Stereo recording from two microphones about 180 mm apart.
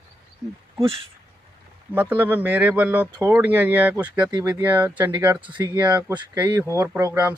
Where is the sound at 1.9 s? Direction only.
10° right (ahead or behind).